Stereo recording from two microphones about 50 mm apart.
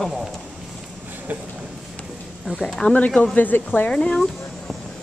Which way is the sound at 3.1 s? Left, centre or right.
Left.